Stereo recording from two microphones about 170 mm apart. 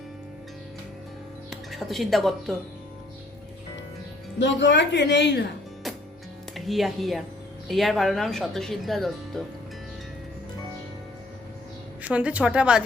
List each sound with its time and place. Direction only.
1.5 s speech: centre (ahead or behind)
4.4 s speech: 90° left
6.5 s speech: centre (ahead or behind)
12.0 s speech: 5° right (ahead or behind)